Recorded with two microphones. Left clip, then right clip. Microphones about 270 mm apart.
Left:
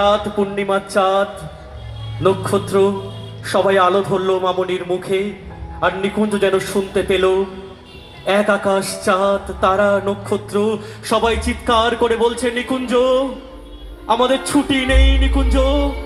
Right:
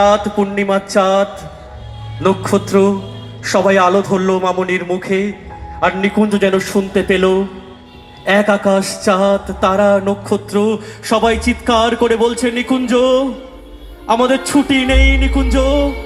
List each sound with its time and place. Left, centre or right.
0.0 s speech: right
5.8 s music: right